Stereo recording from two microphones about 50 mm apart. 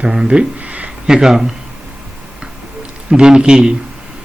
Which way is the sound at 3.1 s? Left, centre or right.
Centre.